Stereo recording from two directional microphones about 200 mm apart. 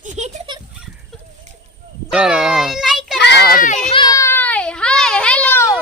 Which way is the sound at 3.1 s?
55° left (ahead or behind).